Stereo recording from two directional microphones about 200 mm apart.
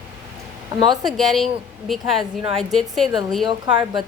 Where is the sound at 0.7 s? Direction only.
25° right (ahead or behind).